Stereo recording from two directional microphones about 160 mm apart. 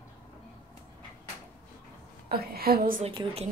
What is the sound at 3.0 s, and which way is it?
Speech, 40° right (ahead or behind).